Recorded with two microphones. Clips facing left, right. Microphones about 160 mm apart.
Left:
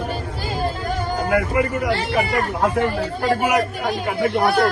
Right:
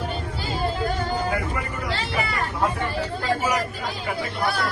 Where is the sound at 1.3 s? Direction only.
60° left (ahead or behind).